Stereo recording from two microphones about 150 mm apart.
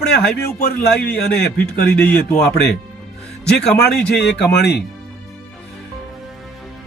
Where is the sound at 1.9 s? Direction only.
10° left (ahead or behind).